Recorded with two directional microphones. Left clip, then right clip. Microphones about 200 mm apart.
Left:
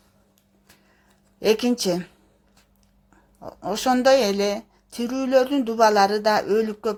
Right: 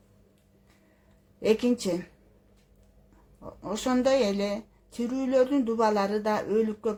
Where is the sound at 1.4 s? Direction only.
25° left (ahead or behind).